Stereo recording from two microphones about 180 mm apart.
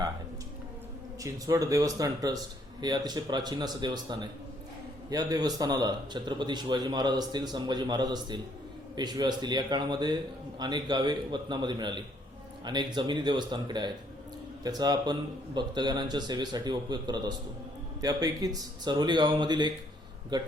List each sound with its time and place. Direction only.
1.2 s a man's voice: 20° right (ahead or behind)